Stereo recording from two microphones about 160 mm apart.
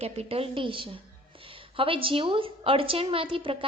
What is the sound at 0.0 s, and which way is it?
A woman's voice, 40° right (ahead or behind).